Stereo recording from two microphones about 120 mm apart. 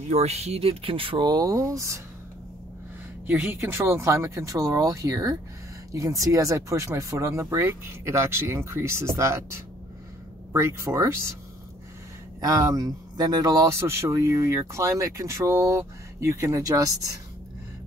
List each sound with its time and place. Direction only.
0.1 s speech: 65° right (ahead or behind); by 2.0 s 25° right (ahead or behind)
3.3 s speech: 20° right (ahead or behind)
12.4 s speech: 30° right (ahead or behind)